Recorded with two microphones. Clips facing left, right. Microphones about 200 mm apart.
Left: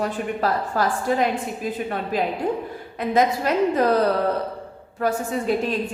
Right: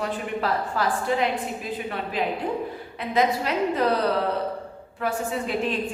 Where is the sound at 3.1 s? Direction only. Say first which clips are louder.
Left 3 dB; 45° left (ahead or behind).